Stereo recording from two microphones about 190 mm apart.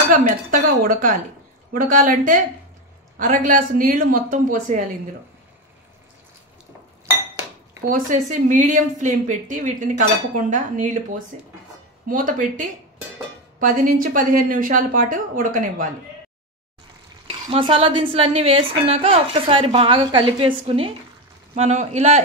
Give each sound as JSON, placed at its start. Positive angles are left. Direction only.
{"t": 0.1, "sound": "a woman's voice", "side_deg": -45}
{"t": 7.9, "sound": "a woman's voice", "side_deg": -40}
{"t": 17.3, "sound": "a woman's voice", "side_deg": -30}